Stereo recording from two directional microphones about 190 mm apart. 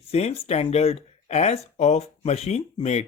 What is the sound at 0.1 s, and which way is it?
Speech, 35° left (ahead or behind).